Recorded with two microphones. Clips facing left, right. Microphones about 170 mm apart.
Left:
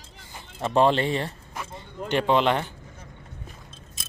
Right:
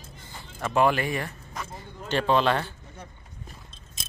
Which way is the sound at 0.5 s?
30° left (ahead or behind).